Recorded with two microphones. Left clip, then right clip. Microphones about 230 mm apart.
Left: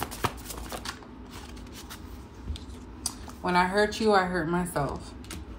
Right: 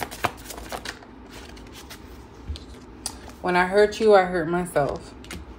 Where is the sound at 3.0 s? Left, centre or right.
Centre.